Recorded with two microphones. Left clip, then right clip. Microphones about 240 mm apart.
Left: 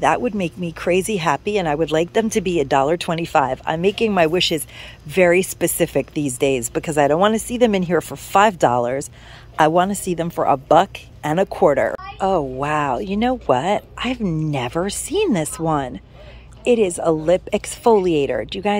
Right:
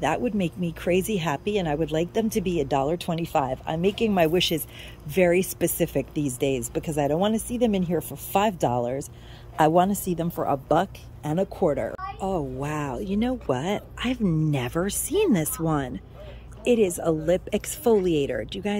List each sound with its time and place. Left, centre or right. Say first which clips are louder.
0.0 s speech: left 7 dB; centre
12.2 s a child's voice: left 10 dB; left
12.5 s speech: left 10 dB; centre